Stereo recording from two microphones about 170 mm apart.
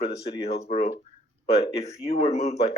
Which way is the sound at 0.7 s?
45° left (ahead or behind).